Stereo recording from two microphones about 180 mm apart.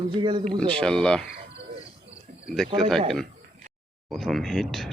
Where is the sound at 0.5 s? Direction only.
5° left (ahead or behind).